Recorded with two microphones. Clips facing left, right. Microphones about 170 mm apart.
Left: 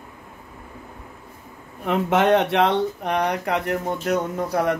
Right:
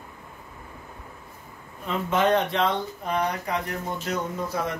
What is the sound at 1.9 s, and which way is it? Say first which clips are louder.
Speech: left 5 dB; 70° left (ahead or behind).